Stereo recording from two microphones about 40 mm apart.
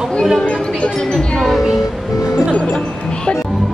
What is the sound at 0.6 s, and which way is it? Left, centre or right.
Music, left.